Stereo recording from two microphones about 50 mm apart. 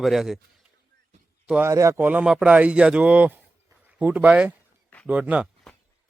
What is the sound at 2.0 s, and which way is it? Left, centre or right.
Speech, right.